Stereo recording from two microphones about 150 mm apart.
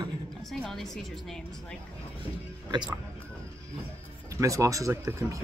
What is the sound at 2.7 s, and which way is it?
Speech, 30° right (ahead or behind).